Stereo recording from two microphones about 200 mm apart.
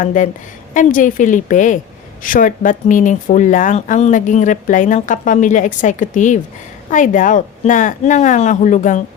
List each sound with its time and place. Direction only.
0.0 s speech: 40° left (ahead or behind)